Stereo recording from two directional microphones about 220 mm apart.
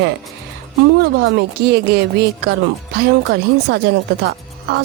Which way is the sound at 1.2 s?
50° right (ahead or behind).